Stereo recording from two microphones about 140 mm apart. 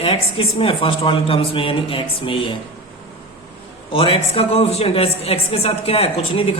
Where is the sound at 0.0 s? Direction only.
40° left (ahead or behind).